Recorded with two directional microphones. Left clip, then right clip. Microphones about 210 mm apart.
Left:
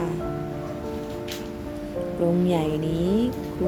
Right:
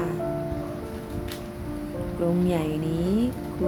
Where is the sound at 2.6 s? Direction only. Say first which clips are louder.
Left 2 dB; 10° left (ahead or behind).